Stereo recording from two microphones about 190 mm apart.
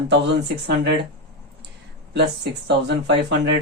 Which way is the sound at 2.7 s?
65° right (ahead or behind).